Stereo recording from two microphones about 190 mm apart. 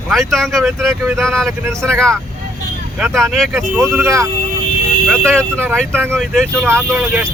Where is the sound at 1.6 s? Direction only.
15° right (ahead or behind).